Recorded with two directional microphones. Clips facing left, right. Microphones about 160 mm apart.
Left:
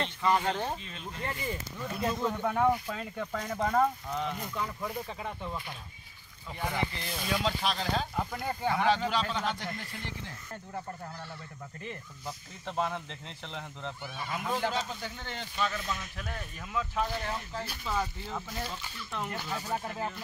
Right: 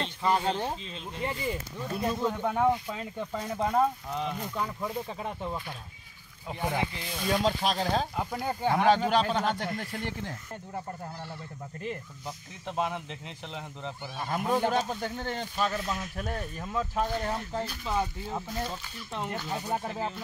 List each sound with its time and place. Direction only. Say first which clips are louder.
0.0 s speech: right 1 dB; 25° right (ahead or behind)
1.2 s speech: right 4 dB; 15° right (ahead or behind)
2.1 s speech: right 1 dB; 5° right (ahead or behind)
7.2 s speech: right 4 dB; 40° right (ahead or behind)
8.3 s speech: right 3 dB; 25° right (ahead or behind)
8.7 s speech: right 5 dB; 45° right (ahead or behind)
12.6 s speech: right 1 dB; 15° right (ahead or behind)
14.1 s speech: right 6 dB; 40° right (ahead or behind)
17.8 s speech: right 1 dB; 20° right (ahead or behind)